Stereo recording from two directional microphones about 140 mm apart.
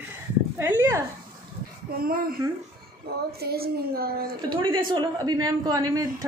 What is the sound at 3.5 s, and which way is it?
Speech, 90° right.